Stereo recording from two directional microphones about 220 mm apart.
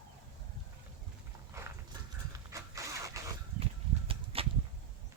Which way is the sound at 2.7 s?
15° right (ahead or behind).